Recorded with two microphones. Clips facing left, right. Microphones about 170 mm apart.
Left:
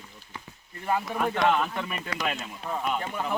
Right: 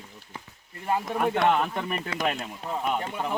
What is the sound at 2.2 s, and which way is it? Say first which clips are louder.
Speech: right 3 dB; 50° right (ahead or behind).